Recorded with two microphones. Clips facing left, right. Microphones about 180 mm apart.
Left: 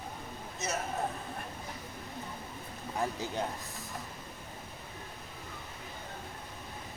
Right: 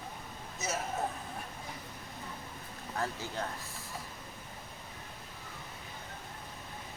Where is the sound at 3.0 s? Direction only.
15° left (ahead or behind).